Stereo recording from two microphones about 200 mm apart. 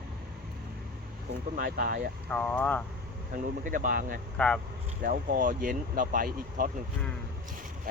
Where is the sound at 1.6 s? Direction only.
45° right (ahead or behind).